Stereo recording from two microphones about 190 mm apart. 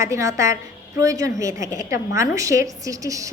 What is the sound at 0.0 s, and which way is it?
A woman's voice, 15° right (ahead or behind).